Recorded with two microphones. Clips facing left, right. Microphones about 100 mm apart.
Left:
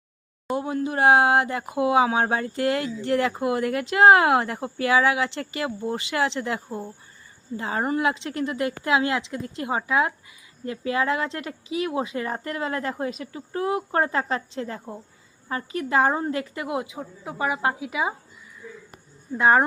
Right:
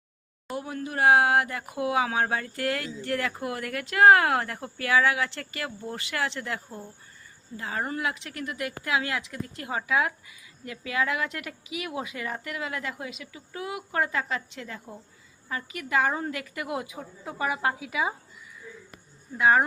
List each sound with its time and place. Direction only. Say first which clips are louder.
0.5 s a woman's voice: left 7 dB; 25° left (ahead or behind)
19.4 s a woman's voice: left 3 dB; 30° left (ahead or behind)